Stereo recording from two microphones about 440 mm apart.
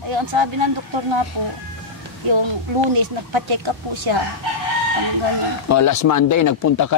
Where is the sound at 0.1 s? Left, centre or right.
Right.